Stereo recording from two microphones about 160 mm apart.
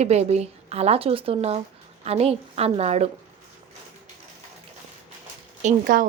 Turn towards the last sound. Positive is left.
turn(degrees=-60)  # may be behind; listen again after turning